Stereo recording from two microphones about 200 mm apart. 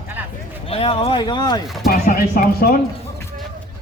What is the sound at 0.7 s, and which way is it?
Speech, 30° left (ahead or behind).